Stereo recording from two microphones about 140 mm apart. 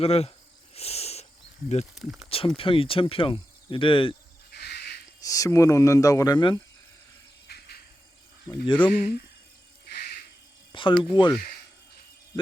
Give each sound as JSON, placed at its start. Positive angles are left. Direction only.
{"t": 0.0, "sound": "cricket", "side_deg": 45}
{"t": 2.0, "sound": "speech", "side_deg": -5}
{"t": 2.6, "sound": "speech", "side_deg": 40}
{"t": 5.2, "sound": "speech", "side_deg": 25}
{"t": 8.4, "sound": "speech", "side_deg": 35}
{"t": 10.7, "sound": "speech", "side_deg": 35}